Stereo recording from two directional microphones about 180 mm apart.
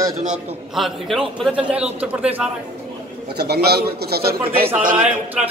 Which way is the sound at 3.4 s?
65° right (ahead or behind).